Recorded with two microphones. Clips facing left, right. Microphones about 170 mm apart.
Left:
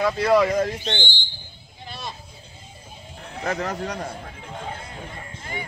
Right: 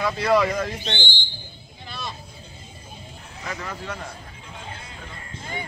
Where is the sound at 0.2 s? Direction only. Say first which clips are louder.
Left 2 dB; 45° left (ahead or behind).